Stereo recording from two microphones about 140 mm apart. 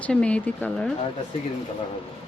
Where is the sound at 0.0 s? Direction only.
10° left (ahead or behind).